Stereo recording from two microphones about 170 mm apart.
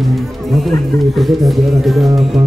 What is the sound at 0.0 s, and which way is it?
Speech, centre (ahead or behind).